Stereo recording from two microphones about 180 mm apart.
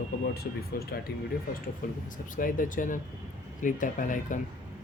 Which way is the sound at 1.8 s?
50° left (ahead or behind).